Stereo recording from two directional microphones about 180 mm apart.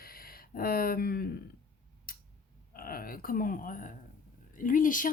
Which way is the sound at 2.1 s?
55° left (ahead or behind).